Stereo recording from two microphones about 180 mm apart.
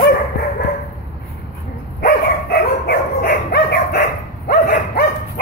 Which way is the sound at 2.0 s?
65° left (ahead or behind).